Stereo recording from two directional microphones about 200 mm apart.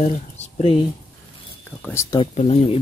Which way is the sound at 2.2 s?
30° left (ahead or behind).